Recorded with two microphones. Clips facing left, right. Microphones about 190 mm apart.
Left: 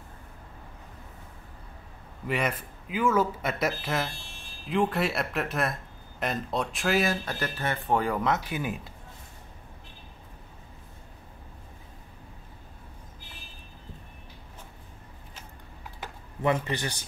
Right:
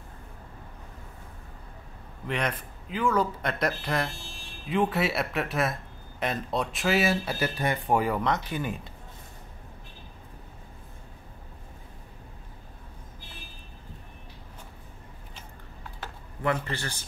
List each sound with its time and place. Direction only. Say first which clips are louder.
2.2 s speech: left 1 dB; 5° left (ahead or behind)
8.2 s speech: even; 5° left (ahead or behind)
15.8 s typing: even; 15° left (ahead or behind)